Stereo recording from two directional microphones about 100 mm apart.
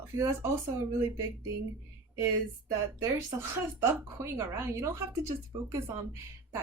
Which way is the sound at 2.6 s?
35° right (ahead or behind).